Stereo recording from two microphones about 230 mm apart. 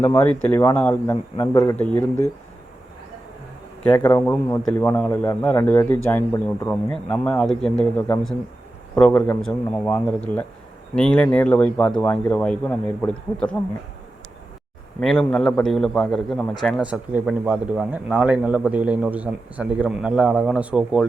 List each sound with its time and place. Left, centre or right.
0.0 s a man's voice: centre
3.8 s a man's voice: centre
15.0 s a man's voice: centre